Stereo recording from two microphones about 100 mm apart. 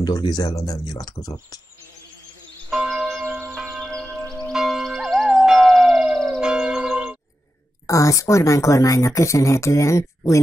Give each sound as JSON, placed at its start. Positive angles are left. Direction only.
{"t": 0.0, "sound": "speech", "side_deg": 40}
{"t": 2.7, "sound": "church bell", "side_deg": -5}
{"t": 3.4, "sound": "music", "side_deg": 0}
{"t": 7.8, "sound": "speech", "side_deg": 35}